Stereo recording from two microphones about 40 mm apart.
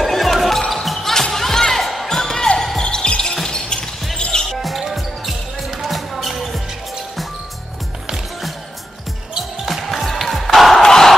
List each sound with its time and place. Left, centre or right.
0.0 s basketball bounce: centre
2.0 s music: centre
3.4 s basketball bounce: centre
4.2 s music: centre
4.5 s music: centre
5.9 s basketball bounce: centre
9.7 s music: centre
10.8 s a sound: centre